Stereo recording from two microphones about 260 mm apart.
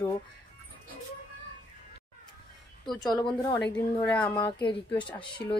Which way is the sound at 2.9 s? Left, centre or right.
Centre.